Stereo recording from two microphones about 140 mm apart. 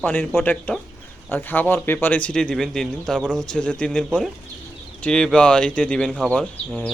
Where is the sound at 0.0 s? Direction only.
15° left (ahead or behind).